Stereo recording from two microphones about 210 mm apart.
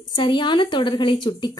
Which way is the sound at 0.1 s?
20° left (ahead or behind).